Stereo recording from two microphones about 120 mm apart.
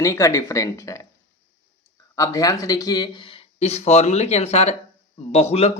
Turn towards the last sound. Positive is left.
turn(degrees=65)  # may be behind; listen again after turning